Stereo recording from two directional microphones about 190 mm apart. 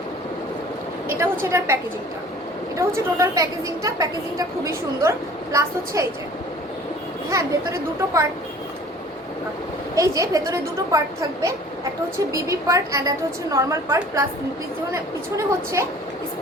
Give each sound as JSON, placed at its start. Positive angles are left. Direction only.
{"t": 1.0, "sound": "a woman's voice", "side_deg": -10}
{"t": 7.3, "sound": "a woman's voice", "side_deg": -15}
{"t": 9.9, "sound": "a woman's voice", "side_deg": -15}
{"t": 12.3, "sound": "a woman's voice", "side_deg": -15}
{"t": 15.4, "sound": "a woman's voice", "side_deg": -15}